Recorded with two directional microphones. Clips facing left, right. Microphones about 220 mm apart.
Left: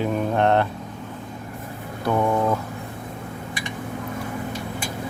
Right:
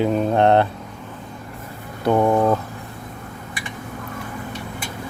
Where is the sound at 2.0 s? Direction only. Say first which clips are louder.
Right 4 dB; 25° right (ahead or behind).